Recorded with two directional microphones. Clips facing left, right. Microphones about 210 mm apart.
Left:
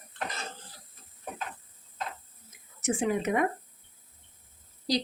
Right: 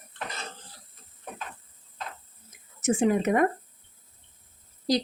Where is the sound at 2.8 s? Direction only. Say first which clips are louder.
Right 5 dB; 45° right (ahead or behind).